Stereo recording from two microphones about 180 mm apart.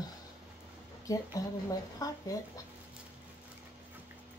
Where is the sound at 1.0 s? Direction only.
20° left (ahead or behind).